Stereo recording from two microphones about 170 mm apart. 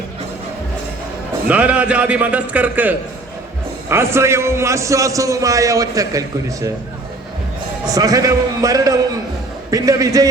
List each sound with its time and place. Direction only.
1.5 s a man's voice: 10° right (ahead or behind)
7.9 s a man's voice: 20° right (ahead or behind)